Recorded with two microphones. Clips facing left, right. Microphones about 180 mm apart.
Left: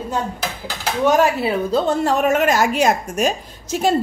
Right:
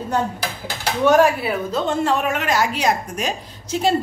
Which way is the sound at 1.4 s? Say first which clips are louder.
Left 4 dB; 35° left (ahead or behind).